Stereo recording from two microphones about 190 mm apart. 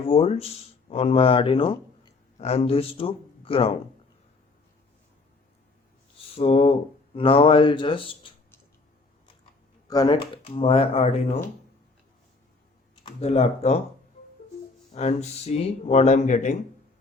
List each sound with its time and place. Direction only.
0.0 s speech: 30° left (ahead or behind)
6.3 s speech: 35° left (ahead or behind)
9.9 s speech: 20° left (ahead or behind)
13.1 s speech: 35° left (ahead or behind)
14.9 s speech: 35° left (ahead or behind)